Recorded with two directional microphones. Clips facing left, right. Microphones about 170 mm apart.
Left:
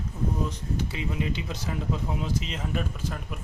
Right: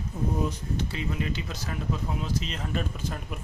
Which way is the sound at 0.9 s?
15° left (ahead or behind).